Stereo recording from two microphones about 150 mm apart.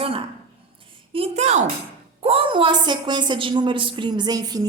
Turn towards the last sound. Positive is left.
turn(degrees=-25)  # may be behind; listen again after turning